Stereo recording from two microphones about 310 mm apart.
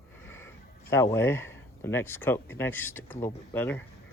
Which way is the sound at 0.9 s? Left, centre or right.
Centre.